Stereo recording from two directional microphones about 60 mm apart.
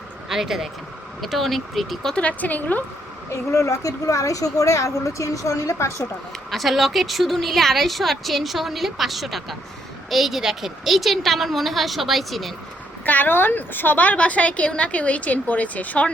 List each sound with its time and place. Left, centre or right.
0.3 s a woman's voice: centre
2.1 s a woman's voice: left
3.5 s speech: left
6.5 s a woman's voice: centre
13.1 s a woman's voice: left